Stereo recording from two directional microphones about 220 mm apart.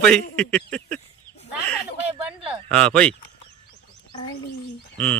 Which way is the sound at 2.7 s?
5° left (ahead or behind).